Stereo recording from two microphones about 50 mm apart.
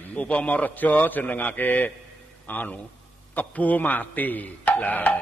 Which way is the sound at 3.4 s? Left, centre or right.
Left.